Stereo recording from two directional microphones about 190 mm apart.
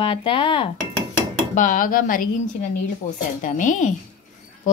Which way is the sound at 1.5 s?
45° left (ahead or behind).